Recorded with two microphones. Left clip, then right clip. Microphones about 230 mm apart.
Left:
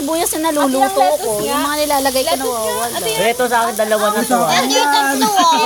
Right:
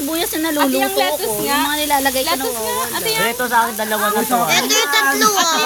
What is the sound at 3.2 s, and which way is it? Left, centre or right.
Speech, centre.